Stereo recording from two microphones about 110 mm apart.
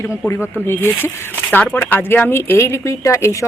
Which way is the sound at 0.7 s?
20° left (ahead or behind).